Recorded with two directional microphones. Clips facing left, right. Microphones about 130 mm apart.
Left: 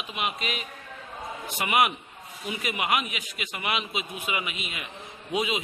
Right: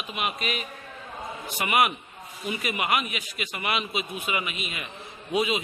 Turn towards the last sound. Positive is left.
turn(degrees=15)  # may be behind; listen again after turning